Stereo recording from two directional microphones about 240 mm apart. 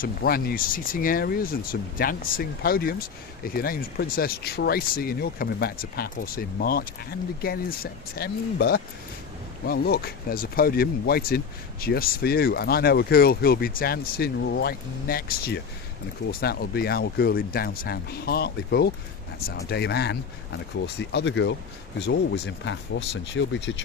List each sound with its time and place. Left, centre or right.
0.0 s speech: left